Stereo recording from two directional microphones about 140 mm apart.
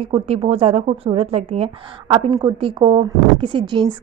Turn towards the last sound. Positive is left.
turn(degrees=-35)  # may be behind; listen again after turning